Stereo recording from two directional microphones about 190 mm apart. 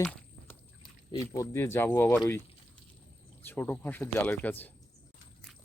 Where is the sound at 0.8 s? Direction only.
15° left (ahead or behind).